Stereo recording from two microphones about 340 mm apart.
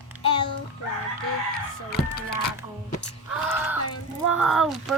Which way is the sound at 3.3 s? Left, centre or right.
Centre.